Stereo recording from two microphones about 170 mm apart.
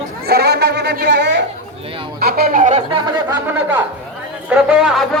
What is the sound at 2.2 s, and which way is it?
Speech, 65° right (ahead or behind).